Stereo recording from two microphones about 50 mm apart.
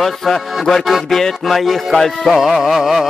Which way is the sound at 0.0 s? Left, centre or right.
Centre.